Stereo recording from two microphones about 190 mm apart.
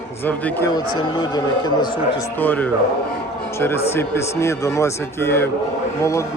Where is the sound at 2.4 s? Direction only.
10° left (ahead or behind).